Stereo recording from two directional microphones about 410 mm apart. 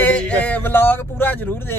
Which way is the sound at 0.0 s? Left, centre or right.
Centre.